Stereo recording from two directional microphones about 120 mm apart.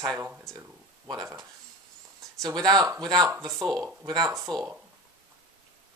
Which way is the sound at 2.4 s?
35° right (ahead or behind).